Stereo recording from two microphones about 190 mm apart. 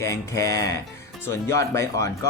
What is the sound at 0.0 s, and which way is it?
Speech, 15° left (ahead or behind).